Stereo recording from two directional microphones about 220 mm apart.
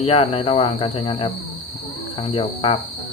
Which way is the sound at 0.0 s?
25° left (ahead or behind).